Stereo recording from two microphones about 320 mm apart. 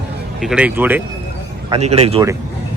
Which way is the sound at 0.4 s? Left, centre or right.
Centre.